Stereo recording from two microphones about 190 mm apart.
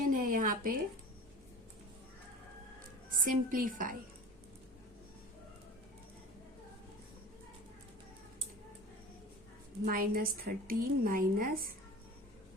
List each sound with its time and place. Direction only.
0.0 s a sound: 45° right (ahead or behind)
3.1 s a woman's voice: 45° right (ahead or behind)
9.8 s a woman's voice: 50° right (ahead or behind)